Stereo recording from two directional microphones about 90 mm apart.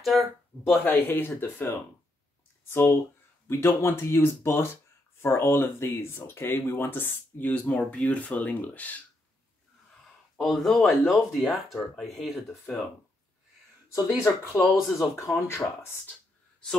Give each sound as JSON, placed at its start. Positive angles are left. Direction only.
{"t": 0.0, "sound": "speech", "side_deg": 0}
{"t": 0.8, "sound": "speech", "side_deg": 25}
{"t": 10.3, "sound": "speech", "side_deg": 0}
{"t": 14.6, "sound": "speech", "side_deg": 0}
{"t": 15.1, "sound": "speech", "side_deg": 30}